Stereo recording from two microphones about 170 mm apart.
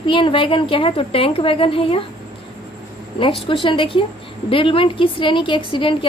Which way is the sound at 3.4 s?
30° left (ahead or behind).